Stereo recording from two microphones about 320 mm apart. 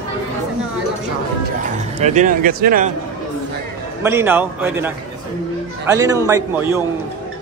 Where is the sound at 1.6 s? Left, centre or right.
Right.